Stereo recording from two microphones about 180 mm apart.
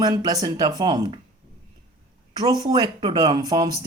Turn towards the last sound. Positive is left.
turn(degrees=-20)  # may be behind; listen again after turning